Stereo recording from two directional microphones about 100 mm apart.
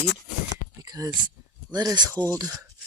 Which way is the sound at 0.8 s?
40° right (ahead or behind).